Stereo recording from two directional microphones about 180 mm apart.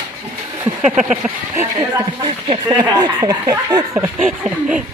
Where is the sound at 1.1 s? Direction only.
10° right (ahead or behind).